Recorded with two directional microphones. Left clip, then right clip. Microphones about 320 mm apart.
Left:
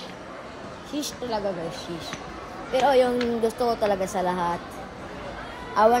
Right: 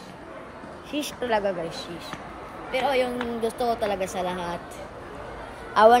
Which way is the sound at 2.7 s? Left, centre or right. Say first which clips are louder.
Left 4 dB; centre.